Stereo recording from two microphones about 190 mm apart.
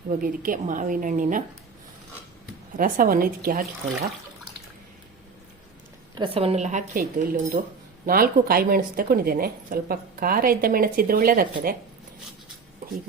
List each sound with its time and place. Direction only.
0.2 s a woman's voice: 45° right (ahead or behind)
2.7 s a woman's voice: 45° right (ahead or behind)
6.1 s a woman's voice: 30° right (ahead or behind); by 11.8 s 50° right (ahead or behind)